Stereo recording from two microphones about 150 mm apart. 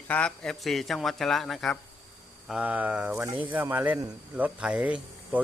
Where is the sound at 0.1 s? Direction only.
5° left (ahead or behind).